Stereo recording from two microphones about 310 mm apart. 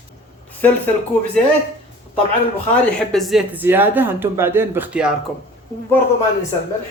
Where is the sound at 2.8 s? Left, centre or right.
Centre.